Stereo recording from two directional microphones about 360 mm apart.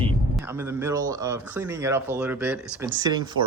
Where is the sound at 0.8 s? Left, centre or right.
Centre.